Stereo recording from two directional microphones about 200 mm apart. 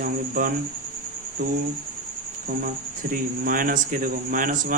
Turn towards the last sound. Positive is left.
turn(degrees=-40)  # may be behind; listen again after turning